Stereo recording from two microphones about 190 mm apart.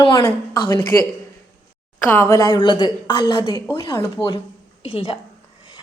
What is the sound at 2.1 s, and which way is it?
A woman's voice, 15° left (ahead or behind).